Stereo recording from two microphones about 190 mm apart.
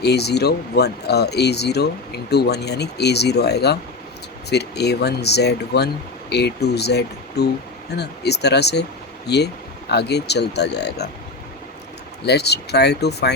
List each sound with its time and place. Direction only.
0.0 s speech: 60° left (ahead or behind)
12.2 s speech: 60° left (ahead or behind)